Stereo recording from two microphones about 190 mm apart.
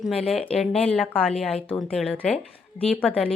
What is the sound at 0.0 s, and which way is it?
A woman's voice, centre (ahead or behind).